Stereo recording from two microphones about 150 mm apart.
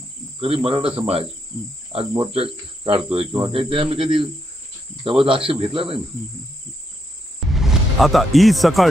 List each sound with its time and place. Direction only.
0.3 s speech: 40° right (ahead or behind)
7.3 s music: centre (ahead or behind)